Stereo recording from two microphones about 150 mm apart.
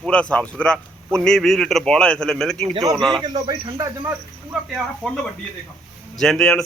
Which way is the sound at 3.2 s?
25° right (ahead or behind).